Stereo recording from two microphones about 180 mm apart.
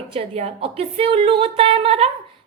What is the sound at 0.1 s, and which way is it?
A woman's voice, 35° right (ahead or behind).